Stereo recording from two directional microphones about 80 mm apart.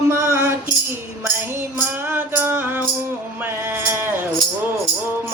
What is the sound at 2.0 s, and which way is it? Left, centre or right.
Music, right.